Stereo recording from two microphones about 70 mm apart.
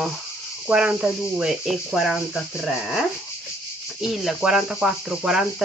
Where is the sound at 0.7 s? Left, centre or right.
Centre.